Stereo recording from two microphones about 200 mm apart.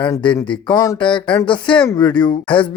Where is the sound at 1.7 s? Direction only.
5° left (ahead or behind).